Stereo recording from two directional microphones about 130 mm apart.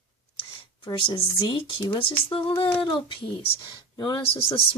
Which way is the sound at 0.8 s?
40° left (ahead or behind).